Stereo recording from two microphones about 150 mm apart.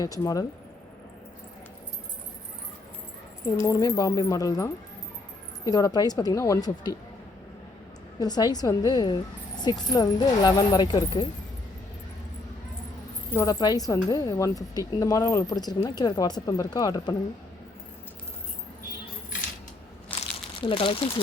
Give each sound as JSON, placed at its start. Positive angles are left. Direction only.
{"t": 0.0, "sound": "a woman's voice", "side_deg": 25}
{"t": 3.6, "sound": "a woman's voice", "side_deg": 25}
{"t": 8.2, "sound": "a woman's voice", "side_deg": 25}
{"t": 13.3, "sound": "a woman's voice", "side_deg": 20}
{"t": 20.6, "sound": "speech", "side_deg": 35}